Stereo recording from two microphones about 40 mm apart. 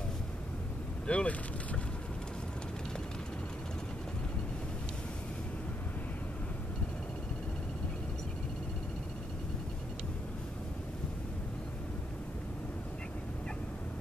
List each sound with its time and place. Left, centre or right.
1.0 s speech: left